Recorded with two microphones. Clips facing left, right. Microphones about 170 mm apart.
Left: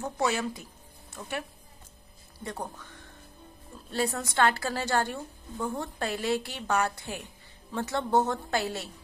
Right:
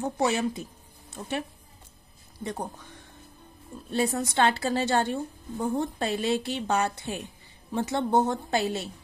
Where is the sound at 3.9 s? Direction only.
20° right (ahead or behind).